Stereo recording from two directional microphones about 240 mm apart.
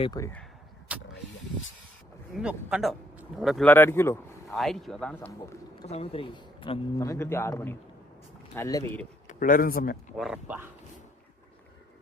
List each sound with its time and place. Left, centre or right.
0.0 s a man's voice: centre
0.9 s vehicle: centre
2.3 s speech: centre
4.4 s speech: centre
5.8 s a man's voice: left; by 9.0 s centre
9.2 s speech: left
10.2 s speech: centre